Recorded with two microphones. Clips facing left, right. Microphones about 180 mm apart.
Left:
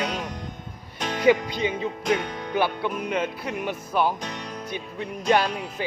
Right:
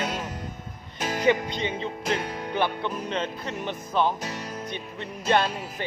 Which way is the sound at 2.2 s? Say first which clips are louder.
Even; 5° right (ahead or behind).